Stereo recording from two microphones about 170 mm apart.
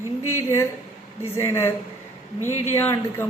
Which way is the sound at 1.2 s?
15° left (ahead or behind).